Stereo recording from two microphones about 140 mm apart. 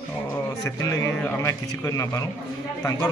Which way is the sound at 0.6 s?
20° left (ahead or behind).